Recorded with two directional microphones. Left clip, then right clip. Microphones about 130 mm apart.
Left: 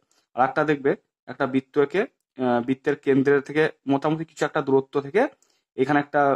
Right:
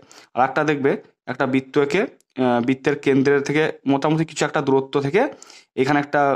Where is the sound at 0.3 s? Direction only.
40° right (ahead or behind).